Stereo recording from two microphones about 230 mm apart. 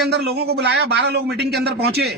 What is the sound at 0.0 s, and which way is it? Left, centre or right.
Speech, right.